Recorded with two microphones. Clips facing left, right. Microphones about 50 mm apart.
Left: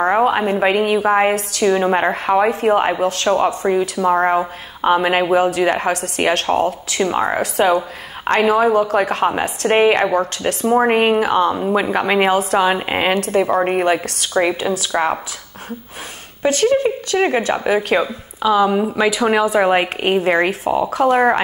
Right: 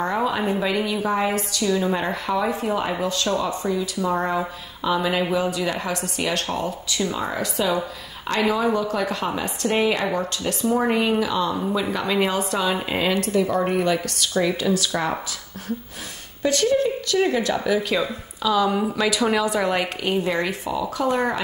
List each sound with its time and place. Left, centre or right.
0.1 s a woman's voice: left
12.4 s a woman's voice: left
12.6 s speech: left
16.4 s a woman's voice: left
18.0 s speech: left
19.6 s a woman's voice: left